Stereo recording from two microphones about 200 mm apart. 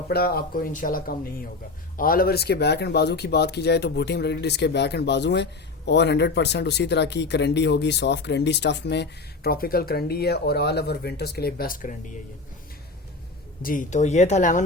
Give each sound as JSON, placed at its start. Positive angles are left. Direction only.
{"t": 0.1, "sound": "speech", "side_deg": 50}
{"t": 13.6, "sound": "speech", "side_deg": 45}